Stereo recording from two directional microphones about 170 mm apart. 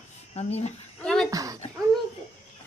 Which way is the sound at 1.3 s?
20° right (ahead or behind).